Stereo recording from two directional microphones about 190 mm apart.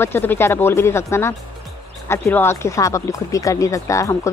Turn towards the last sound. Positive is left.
turn(degrees=15)  # may be behind; listen again after turning